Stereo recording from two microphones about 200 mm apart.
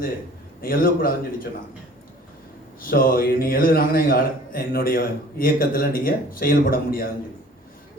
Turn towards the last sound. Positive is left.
turn(degrees=45)  # may be behind; listen again after turning